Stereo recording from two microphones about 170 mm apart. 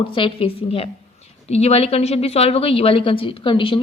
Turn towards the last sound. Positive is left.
turn(degrees=30)  # may be behind; listen again after turning